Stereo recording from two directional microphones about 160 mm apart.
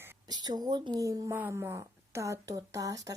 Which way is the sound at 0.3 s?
25° right (ahead or behind).